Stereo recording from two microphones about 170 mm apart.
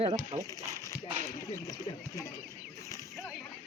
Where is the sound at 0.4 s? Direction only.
20° left (ahead or behind).